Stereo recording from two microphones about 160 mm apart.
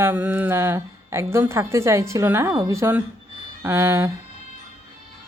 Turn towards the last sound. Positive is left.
turn(degrees=-15)  # may be behind; listen again after turning